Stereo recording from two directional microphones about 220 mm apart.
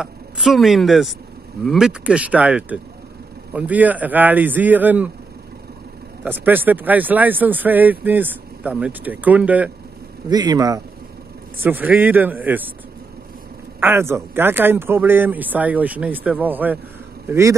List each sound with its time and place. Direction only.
0.0 s a woman's voice: centre (ahead or behind)
6.2 s speech: 10° right (ahead or behind)
10.3 s speech: 20° right (ahead or behind)
13.7 s speech: 10° right (ahead or behind)